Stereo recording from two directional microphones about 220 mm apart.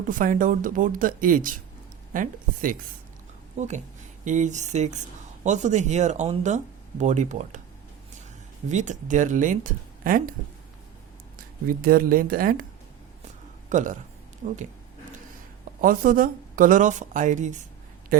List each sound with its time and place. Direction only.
0.1 s a woman's voice: 35° right (ahead or behind)
8.7 s a woman's voice: 35° right (ahead or behind)
11.3 s speech: 40° right (ahead or behind)
13.7 s speech: 35° right (ahead or behind)
15.8 s a woman's voice: 40° right (ahead or behind)
18.1 s a sound: 40° right (ahead or behind)